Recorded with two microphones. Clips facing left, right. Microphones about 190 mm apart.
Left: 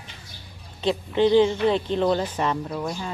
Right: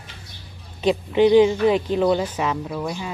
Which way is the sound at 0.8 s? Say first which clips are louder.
Right 4 dB; 15° right (ahead or behind).